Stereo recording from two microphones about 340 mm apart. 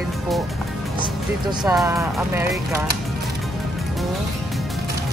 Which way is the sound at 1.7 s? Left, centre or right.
Centre.